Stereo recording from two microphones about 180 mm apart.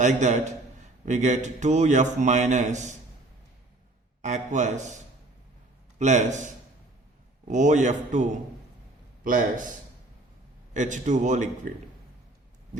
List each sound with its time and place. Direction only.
0.0 s a man's voice: 40° right (ahead or behind)
4.2 s a man's voice: 40° right (ahead or behind)
6.0 s a man's voice: 40° right (ahead or behind)
7.5 s a man's voice: 40° right (ahead or behind)
10.8 s a man's voice: 45° right (ahead or behind)